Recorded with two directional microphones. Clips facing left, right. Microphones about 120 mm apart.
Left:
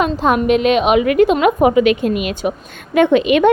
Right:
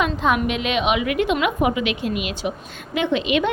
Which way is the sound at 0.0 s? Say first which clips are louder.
Left 5 dB; 40° left (ahead or behind).